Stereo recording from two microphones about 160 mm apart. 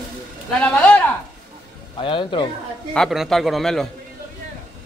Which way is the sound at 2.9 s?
Centre (ahead or behind).